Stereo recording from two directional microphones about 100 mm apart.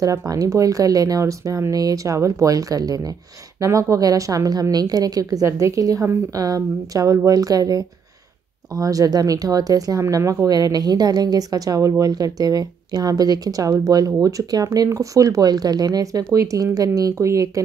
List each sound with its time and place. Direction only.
0.0 s speech: 35° right (ahead or behind)